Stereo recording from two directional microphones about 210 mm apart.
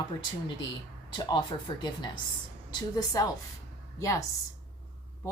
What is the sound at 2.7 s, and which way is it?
Speech, 20° left (ahead or behind).